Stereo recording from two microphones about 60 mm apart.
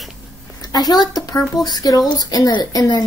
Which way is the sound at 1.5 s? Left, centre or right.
Left.